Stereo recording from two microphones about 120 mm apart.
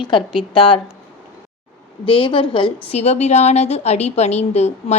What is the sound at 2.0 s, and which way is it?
Speech, 45° left (ahead or behind).